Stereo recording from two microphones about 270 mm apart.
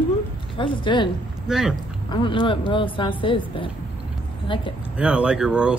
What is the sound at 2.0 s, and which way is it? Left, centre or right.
Speech, centre.